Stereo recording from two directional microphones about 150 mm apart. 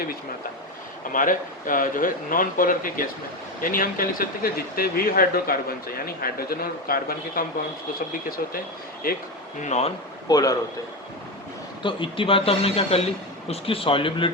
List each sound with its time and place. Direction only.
1.1 s speech: 65° left (ahead or behind); by 7.4 s 80° left
9.0 s speech: 80° left
9.6 s speech: 50° left (ahead or behind)
10.2 s a man's voice: 25° left (ahead or behind)
11.8 s speech: 35° left (ahead or behind)